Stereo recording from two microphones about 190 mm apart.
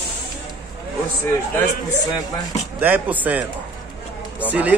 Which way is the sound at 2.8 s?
10° right (ahead or behind).